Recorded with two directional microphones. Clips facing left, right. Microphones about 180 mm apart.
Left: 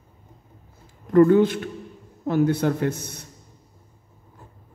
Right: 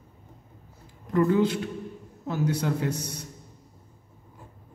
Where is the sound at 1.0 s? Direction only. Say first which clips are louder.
Left 7 dB; 55° left (ahead or behind).